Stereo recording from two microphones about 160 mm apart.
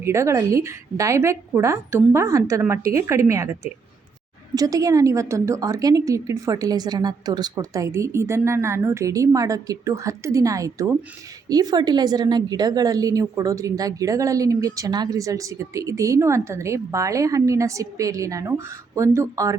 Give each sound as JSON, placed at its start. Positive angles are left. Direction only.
{"t": 0.0, "sound": "a woman's voice", "side_deg": -15}